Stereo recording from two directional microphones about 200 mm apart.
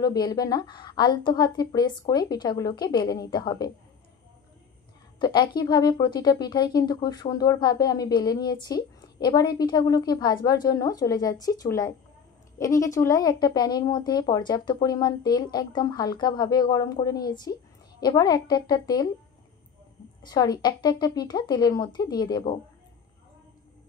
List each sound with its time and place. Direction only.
0.0 s speech: 20° left (ahead or behind)
5.2 s speech: 20° left (ahead or behind)
20.2 s speech: 20° left (ahead or behind)